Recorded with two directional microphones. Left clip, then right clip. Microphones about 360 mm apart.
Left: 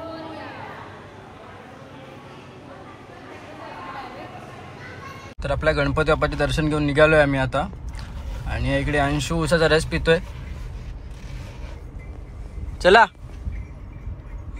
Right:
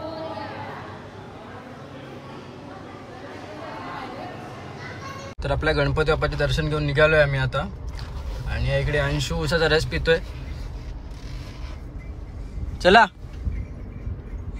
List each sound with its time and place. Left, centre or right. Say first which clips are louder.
5.4 s speech: left 1 dB; centre
12.8 s speech: left 1 dB; centre